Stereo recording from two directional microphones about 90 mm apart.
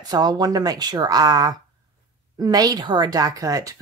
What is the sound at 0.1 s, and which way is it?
Speech, 50° right (ahead or behind).